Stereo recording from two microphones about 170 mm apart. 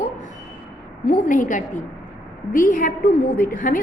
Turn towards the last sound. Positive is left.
turn(degrees=55)  # may be behind; listen again after turning